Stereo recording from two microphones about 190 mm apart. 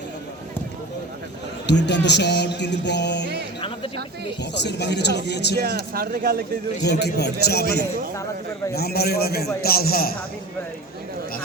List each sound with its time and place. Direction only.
1.6 s music: 65° left (ahead or behind)
4.5 s music: 65° left (ahead or behind)
5.5 s speech: 55° right (ahead or behind)
7.0 s music: 60° left (ahead or behind)
9.6 s speech: 55° left (ahead or behind)